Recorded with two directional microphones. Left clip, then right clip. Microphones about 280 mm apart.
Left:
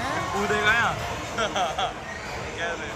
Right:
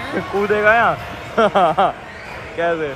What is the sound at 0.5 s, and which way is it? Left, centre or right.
Speech, centre.